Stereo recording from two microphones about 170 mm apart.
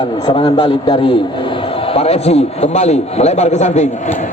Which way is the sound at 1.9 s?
35° left (ahead or behind).